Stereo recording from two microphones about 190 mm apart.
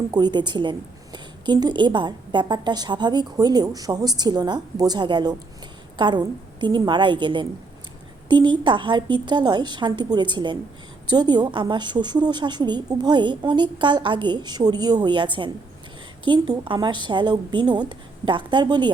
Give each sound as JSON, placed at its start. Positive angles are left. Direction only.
{"t": 0.1, "sound": "a woman's voice", "side_deg": -20}